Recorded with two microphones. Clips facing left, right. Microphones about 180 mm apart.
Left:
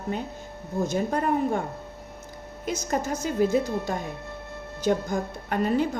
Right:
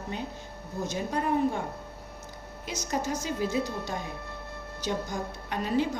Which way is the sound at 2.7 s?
50° left (ahead or behind).